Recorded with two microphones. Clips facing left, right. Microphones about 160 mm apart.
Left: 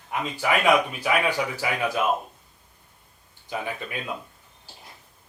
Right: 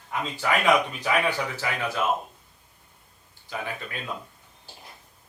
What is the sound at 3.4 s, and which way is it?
Speech, 15° left (ahead or behind).